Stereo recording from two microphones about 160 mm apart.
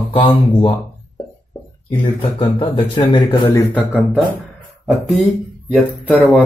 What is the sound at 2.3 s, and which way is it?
Speech, 30° left (ahead or behind).